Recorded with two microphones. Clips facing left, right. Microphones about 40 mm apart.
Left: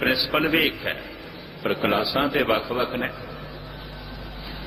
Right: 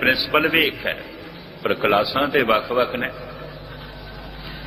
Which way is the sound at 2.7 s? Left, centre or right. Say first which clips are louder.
Right 5 dB; centre.